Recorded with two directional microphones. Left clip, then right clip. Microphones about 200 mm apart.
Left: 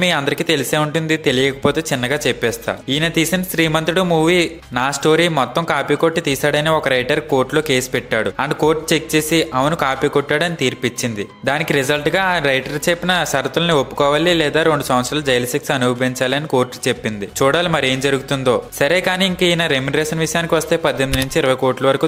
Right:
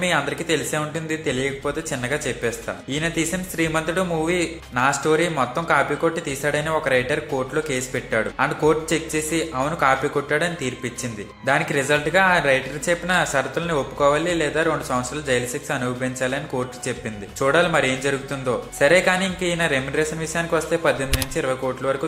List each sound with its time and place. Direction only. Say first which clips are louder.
0.0 s speech: left 5 dB; 40° left (ahead or behind)